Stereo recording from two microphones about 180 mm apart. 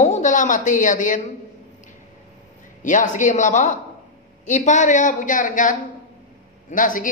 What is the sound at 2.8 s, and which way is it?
Speech, 45° left (ahead or behind).